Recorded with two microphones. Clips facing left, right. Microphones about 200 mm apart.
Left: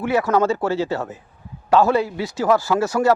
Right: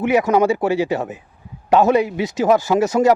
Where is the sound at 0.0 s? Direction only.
15° right (ahead or behind).